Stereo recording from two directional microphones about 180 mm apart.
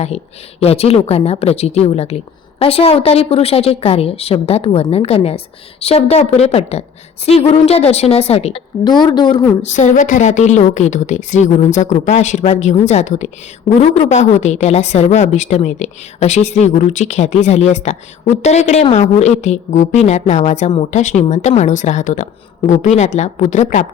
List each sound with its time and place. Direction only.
0.6 s a woman's voice: 35° left (ahead or behind)
8.8 s a woman's voice: 25° left (ahead or behind)
9.6 s a woman's voice: 40° left (ahead or behind)